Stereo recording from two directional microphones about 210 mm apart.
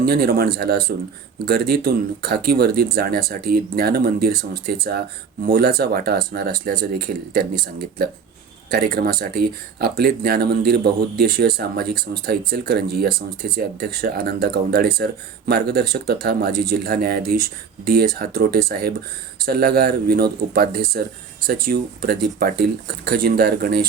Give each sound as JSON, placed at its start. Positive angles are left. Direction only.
{"t": 0.0, "sound": "speech", "side_deg": -50}
{"t": 8.7, "sound": "speech", "side_deg": -50}